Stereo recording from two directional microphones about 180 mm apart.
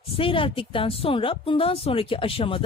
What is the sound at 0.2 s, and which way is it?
Speech, 30° left (ahead or behind).